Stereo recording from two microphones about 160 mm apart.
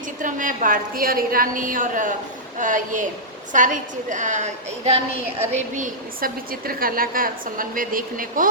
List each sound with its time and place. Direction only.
0.2 s a woman's voice: 55° right (ahead or behind)
5.7 s a woman's voice: 60° right (ahead or behind)